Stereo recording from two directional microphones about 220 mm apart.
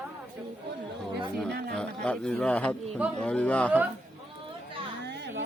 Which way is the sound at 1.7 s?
5° left (ahead or behind).